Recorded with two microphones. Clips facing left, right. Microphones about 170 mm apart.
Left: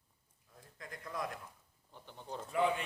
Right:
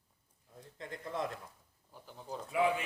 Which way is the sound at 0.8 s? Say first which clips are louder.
Right 4 dB; 25° right (ahead or behind).